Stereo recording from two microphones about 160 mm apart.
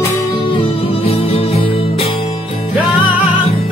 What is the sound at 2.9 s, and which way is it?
Music, 10° right (ahead or behind).